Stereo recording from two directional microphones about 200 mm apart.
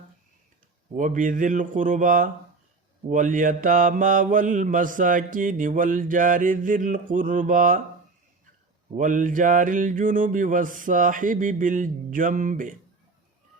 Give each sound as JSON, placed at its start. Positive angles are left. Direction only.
{"t": 0.9, "sound": "mantra", "side_deg": -40}
{"t": 9.0, "sound": "mantra", "side_deg": -40}